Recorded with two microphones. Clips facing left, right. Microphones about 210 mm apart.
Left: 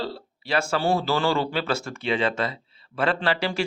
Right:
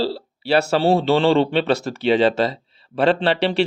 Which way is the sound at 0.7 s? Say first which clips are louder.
Right 6 dB; 30° right (ahead or behind).